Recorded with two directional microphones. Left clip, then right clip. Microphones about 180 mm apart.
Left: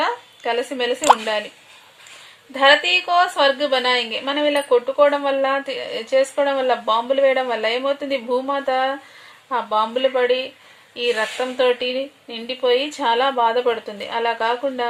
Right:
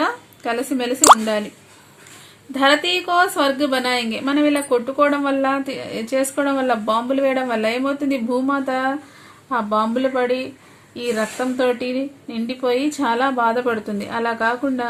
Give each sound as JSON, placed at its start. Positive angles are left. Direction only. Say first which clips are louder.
{"t": 0.0, "sound": "a sound", "louder": "even", "side_deg": 45}
{"t": 0.8, "sound": "a woman's voice", "louder": "right 4 dB", "side_deg": 45}
{"t": 2.5, "sound": "a woman's voice", "louder": "left 2 dB", "side_deg": 45}